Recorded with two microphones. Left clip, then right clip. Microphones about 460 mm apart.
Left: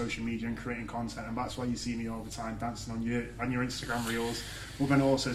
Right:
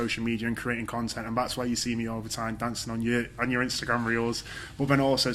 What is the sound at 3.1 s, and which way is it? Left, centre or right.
Speech, right.